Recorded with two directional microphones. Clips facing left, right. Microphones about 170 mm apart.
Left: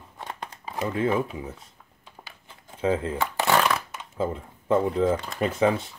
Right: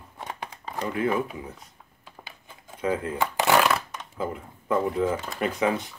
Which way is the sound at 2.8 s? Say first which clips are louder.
Left 2 dB; 30° left (ahead or behind).